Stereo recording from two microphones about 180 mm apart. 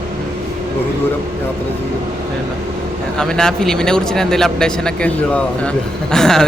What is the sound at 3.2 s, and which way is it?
Speech, 5° left (ahead or behind).